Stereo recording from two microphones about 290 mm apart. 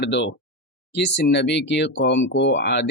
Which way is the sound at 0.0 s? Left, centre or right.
Left.